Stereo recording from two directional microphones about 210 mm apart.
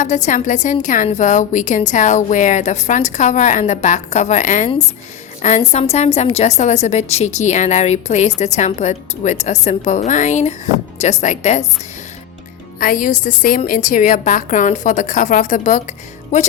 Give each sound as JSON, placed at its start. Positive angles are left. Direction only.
{"t": 0.0, "sound": "a woman's voice", "side_deg": 35}
{"t": 12.8, "sound": "a woman's voice", "side_deg": 40}